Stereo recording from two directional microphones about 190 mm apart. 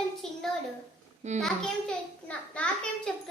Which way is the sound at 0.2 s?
5° left (ahead or behind).